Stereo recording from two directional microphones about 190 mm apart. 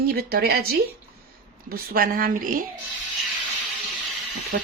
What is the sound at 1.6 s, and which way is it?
Speech, 50° right (ahead or behind).